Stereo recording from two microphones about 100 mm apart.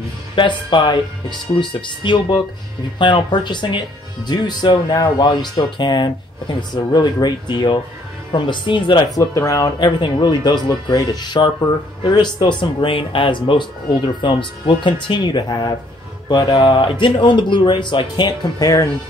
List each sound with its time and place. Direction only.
0.4 s speech: 55° left (ahead or behind)
9.2 s speech: 35° left (ahead or behind)
9.8 s speech: 50° left (ahead or behind)
16.5 s speech: 65° left (ahead or behind); by 18.9 s 40° left (ahead or behind)